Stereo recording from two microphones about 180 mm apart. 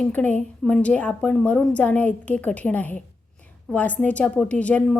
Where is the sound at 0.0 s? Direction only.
10° left (ahead or behind).